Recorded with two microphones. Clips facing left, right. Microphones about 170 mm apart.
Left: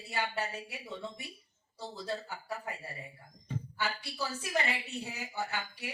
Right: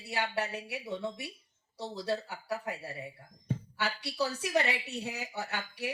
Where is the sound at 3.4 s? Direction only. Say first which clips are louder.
Right 2 dB; 70° right (ahead or behind).